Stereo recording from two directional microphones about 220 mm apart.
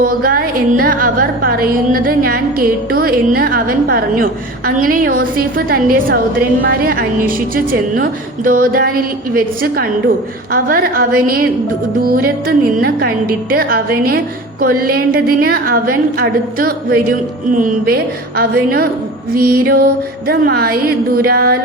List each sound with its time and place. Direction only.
0.0 s a woman's voice: 40° right (ahead or behind)